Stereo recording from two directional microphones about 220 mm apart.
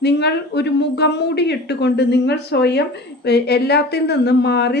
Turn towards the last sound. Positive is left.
turn(degrees=50)  # may be behind; listen again after turning